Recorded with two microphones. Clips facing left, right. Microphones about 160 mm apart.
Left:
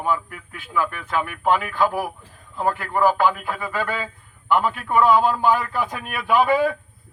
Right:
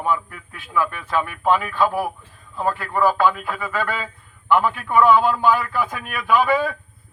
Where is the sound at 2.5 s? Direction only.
10° left (ahead or behind).